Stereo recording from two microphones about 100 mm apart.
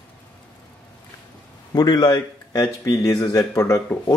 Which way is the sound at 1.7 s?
40° left (ahead or behind).